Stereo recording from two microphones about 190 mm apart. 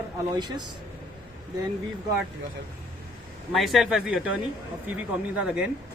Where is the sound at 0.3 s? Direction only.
20° right (ahead or behind).